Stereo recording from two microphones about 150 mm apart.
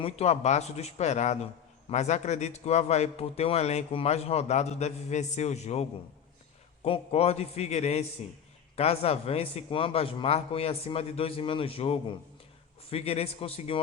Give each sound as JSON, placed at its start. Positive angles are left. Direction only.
{"t": 0.0, "sound": "a man's voice", "side_deg": 45}